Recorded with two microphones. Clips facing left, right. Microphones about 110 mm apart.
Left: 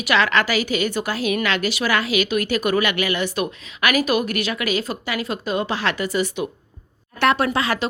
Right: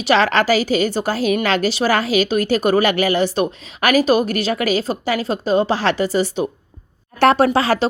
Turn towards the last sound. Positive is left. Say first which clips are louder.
# right 6 dB
turn(degrees=-30)  # may be behind; listen again after turning